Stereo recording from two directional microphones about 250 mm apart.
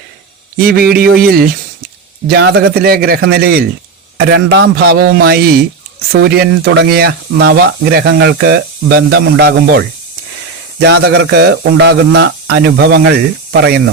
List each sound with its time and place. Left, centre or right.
0.6 s speech: right
10.8 s speech: right